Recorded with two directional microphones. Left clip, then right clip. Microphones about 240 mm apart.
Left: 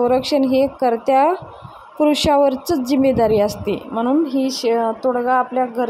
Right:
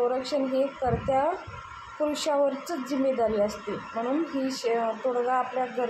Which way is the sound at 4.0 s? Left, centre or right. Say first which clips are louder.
Left 10 dB; left.